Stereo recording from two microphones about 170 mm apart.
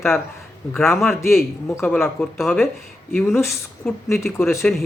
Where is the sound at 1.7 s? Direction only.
10° left (ahead or behind).